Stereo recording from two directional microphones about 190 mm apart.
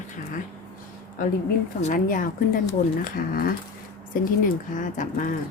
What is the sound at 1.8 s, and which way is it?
A woman's voice, 45° left (ahead or behind).